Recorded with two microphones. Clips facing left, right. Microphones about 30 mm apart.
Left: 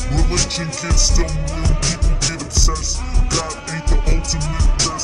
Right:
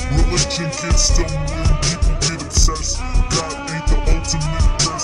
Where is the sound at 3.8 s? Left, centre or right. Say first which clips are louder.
Right 1 dB; centre.